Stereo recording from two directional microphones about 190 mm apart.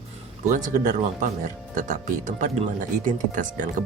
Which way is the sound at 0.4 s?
45° right (ahead or behind).